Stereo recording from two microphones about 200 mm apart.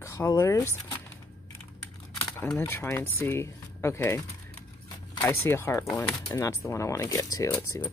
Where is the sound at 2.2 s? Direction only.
15° left (ahead or behind).